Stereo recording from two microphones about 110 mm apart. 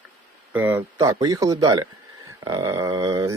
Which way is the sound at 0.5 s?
20° right (ahead or behind).